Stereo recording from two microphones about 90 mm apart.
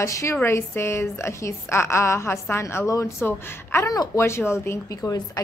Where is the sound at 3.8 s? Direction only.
40° left (ahead or behind).